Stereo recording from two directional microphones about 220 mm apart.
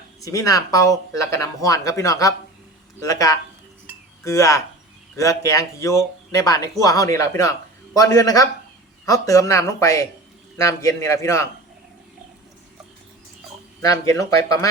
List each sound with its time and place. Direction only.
0.2 s speech: 15° left (ahead or behind)
13.8 s speech: 15° left (ahead or behind)